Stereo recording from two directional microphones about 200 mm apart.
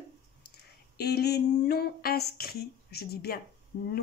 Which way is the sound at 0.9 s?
55° left (ahead or behind).